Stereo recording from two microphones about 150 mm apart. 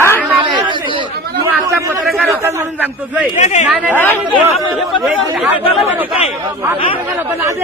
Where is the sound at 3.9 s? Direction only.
15° left (ahead or behind).